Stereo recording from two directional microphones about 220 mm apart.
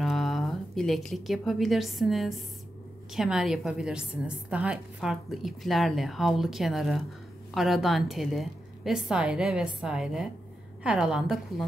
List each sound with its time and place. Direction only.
0.0 s a woman's voice: centre (ahead or behind)